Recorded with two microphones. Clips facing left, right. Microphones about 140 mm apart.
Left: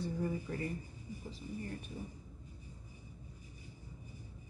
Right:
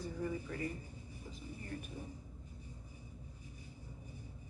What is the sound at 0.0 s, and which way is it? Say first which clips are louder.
Speech: left 3 dB; 35° left (ahead or behind).